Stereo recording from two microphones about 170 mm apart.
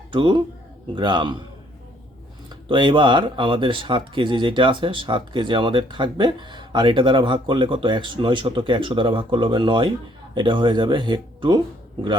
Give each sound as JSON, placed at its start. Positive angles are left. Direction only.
{"t": 0.1, "sound": "speech", "side_deg": -30}
{"t": 2.5, "sound": "speech", "side_deg": -30}